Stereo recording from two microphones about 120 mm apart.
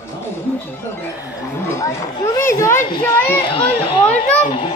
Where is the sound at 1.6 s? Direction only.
25° left (ahead or behind).